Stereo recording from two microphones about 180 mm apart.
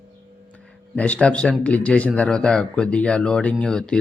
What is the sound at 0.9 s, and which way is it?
A man's voice, 10° left (ahead or behind).